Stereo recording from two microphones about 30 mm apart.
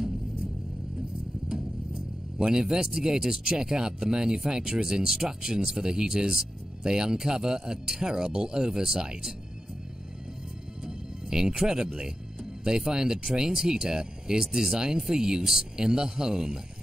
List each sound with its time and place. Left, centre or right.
2.4 s speech: right
11.2 s speech: right